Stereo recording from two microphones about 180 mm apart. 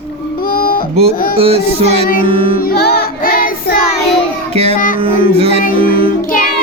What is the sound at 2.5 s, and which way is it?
Music, 60° left (ahead or behind).